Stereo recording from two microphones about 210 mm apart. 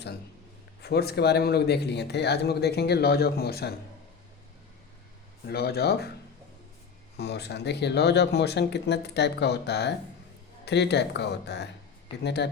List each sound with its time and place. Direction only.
0.8 s speech: 50° left (ahead or behind)
5.5 s speech: 50° left (ahead or behind)
7.2 s speech: 50° left (ahead or behind)